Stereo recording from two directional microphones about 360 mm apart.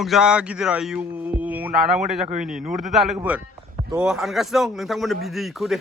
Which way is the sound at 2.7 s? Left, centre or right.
Right.